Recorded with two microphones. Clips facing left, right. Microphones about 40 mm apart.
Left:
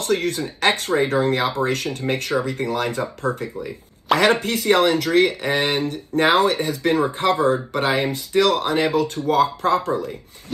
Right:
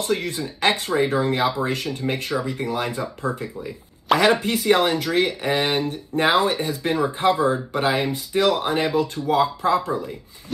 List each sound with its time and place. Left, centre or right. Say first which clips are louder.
0.0 s speech: left 3 dB; left
4.2 s speech: left 1 dB; left
8.4 s speech: left 2 dB; left
9.0 s speech: left 2 dB; left